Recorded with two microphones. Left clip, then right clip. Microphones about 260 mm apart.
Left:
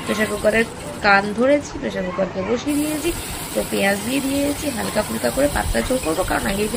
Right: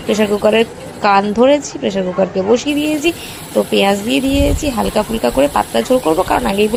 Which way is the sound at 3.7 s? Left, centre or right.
Right.